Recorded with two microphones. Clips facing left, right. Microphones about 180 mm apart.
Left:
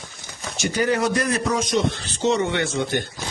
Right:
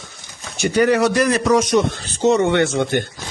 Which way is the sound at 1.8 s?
45° right (ahead or behind).